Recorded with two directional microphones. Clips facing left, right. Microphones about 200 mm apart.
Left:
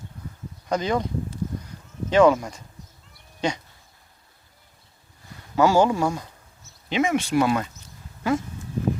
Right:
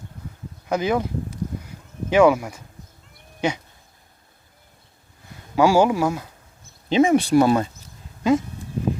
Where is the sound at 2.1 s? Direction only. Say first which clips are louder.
Right 1 dB; 10° right (ahead or behind).